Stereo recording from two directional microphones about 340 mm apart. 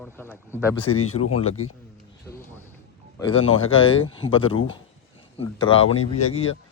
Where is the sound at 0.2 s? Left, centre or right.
Centre.